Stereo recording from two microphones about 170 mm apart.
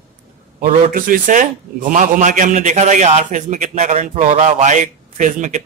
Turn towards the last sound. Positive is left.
turn(degrees=-45)  # may be behind; listen again after turning